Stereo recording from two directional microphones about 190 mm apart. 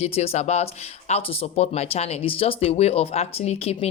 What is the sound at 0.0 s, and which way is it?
A woman's voice, 35° left (ahead or behind).